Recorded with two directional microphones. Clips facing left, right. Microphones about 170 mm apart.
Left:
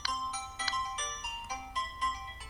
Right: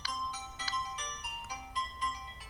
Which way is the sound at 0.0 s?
80° left.